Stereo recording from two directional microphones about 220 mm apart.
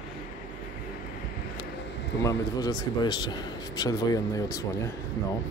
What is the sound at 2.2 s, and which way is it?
A man's voice, 15° left (ahead or behind).